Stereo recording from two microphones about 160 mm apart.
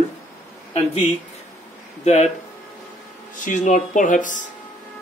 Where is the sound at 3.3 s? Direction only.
50° left (ahead or behind).